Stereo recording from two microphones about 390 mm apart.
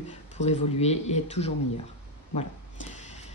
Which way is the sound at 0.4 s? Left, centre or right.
Centre.